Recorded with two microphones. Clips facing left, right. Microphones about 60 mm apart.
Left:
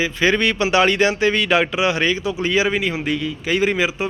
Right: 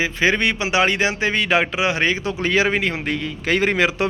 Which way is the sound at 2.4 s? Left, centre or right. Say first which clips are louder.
Right 1 dB; right.